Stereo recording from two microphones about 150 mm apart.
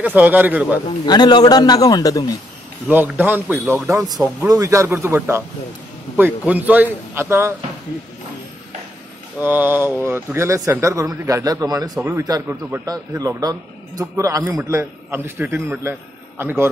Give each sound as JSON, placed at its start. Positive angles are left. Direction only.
{"t": 0.0, "sound": "a man's voice", "side_deg": -10}
{"t": 1.0, "sound": "a man's voice", "side_deg": 30}
{"t": 2.9, "sound": "a man's voice", "side_deg": -10}
{"t": 9.4, "sound": "a man's voice", "side_deg": -15}